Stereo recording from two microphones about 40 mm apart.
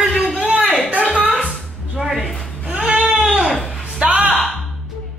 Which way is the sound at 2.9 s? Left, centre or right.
Right.